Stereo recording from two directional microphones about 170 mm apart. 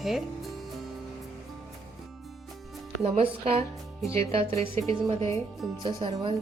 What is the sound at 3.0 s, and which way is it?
Speech, 35° right (ahead or behind).